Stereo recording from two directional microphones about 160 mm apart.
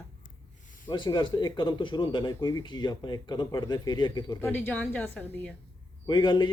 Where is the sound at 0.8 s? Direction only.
30° left (ahead or behind).